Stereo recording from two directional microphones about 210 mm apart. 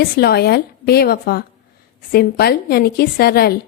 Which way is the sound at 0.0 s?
50° left (ahead or behind).